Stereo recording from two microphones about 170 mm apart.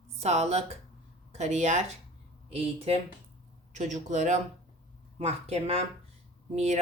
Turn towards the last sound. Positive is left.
turn(degrees=-40)  # may be behind; listen again after turning